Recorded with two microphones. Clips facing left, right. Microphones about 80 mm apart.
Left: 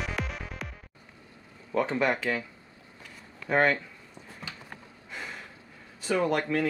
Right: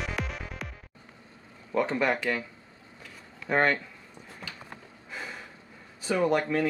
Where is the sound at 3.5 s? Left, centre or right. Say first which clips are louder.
Left 1 dB; centre.